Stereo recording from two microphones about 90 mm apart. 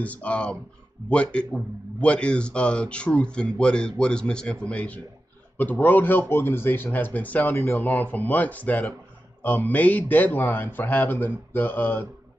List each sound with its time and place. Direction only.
0.0 s a man's voice: 15° left (ahead or behind)
7.5 s speech: 30° left (ahead or behind)